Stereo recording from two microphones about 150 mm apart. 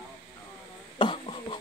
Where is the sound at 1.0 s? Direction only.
35° left (ahead or behind).